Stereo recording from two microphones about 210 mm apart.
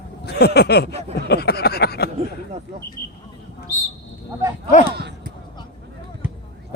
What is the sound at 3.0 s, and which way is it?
Speech, 10° left (ahead or behind).